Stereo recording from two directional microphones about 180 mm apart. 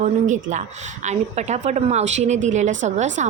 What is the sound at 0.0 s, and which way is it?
A woman's voice, 45° right (ahead or behind).